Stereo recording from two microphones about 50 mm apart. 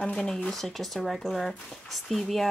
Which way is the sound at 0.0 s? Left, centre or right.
Centre.